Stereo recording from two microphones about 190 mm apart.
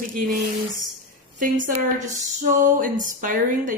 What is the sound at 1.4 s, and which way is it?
A woman's voice, 45° right (ahead or behind).